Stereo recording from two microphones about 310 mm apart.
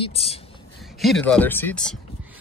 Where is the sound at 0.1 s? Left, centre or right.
Centre.